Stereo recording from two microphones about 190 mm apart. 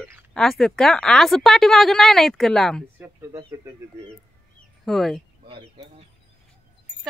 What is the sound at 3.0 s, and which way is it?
Speech, 15° right (ahead or behind).